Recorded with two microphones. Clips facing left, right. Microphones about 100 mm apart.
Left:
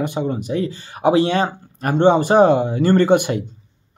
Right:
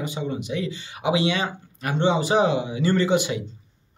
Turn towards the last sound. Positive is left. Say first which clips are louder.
# left 6 dB
turn(degrees=55)  # may be behind; listen again after turning